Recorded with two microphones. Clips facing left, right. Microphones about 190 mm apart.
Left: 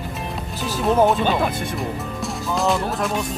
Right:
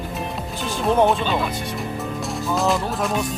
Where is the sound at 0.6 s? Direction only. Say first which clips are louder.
Left 1 dB; 5° left (ahead or behind).